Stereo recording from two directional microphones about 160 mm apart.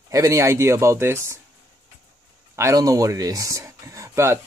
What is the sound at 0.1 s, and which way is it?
Speech, 20° right (ahead or behind).